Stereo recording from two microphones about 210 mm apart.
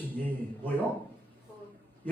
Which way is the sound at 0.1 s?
10° left (ahead or behind).